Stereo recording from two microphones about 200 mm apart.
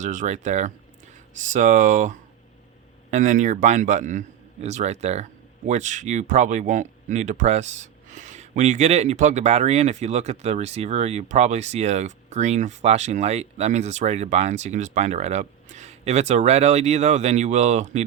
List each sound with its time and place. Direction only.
0.0 s speech: 40° right (ahead or behind)